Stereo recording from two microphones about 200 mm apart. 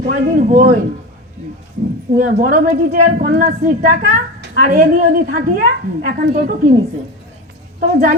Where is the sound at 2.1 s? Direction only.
45° right (ahead or behind).